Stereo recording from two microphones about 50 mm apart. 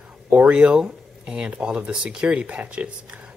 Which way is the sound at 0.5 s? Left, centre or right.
Right.